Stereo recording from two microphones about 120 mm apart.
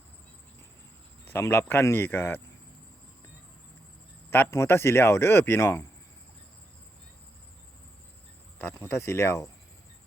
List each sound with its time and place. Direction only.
1.3 s speech: 20° left (ahead or behind)
4.3 s speech: 20° left (ahead or behind)
8.5 s speech: 20° left (ahead or behind)